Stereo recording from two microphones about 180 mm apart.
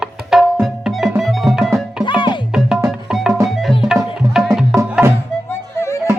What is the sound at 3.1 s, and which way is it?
Music, centre (ahead or behind).